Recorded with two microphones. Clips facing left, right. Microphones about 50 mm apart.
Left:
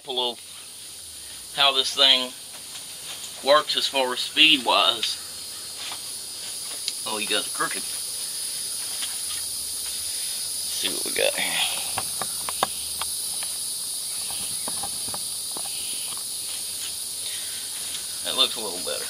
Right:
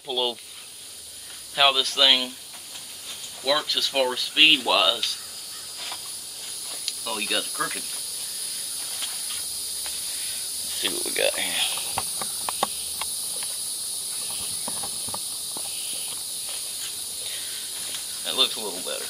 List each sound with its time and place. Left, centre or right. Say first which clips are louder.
0.1 s speech: right 1 dB; centre
1.6 s speech: right 1 dB; centre
3.4 s speech: left 5 dB; centre
6.9 s speech: left 1 dB; centre
10.8 s speech: even; centre
18.2 s cricket: left 1 dB; centre